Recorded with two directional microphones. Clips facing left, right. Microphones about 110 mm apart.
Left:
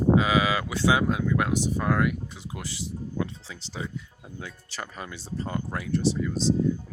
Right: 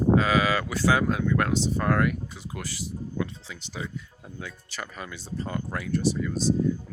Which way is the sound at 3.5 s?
30° left (ahead or behind).